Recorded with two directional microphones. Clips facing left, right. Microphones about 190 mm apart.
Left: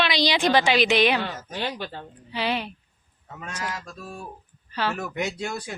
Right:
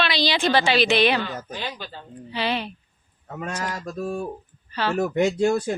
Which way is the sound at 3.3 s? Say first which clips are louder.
Right 4 dB; 45° right (ahead or behind).